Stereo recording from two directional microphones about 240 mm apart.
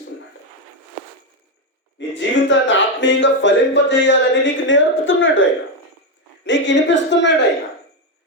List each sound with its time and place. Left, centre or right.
2.0 s speech: left